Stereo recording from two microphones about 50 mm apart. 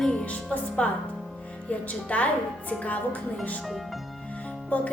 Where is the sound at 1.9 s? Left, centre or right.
Left.